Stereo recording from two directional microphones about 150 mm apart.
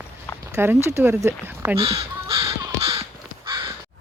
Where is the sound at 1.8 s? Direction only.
40° right (ahead or behind).